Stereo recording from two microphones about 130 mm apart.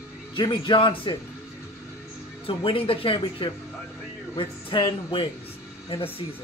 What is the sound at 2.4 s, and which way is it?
Speech, 45° left (ahead or behind).